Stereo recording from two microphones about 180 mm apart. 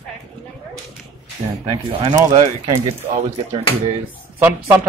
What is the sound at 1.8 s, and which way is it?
Speech, 25° right (ahead or behind).